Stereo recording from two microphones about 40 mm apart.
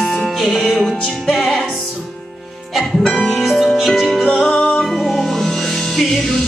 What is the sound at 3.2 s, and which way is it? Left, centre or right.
Music, centre.